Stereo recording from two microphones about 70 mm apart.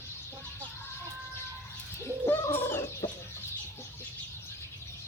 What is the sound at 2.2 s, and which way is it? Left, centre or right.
Bird, left.